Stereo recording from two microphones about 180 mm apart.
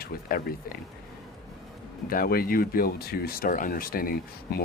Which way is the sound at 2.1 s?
55° left (ahead or behind).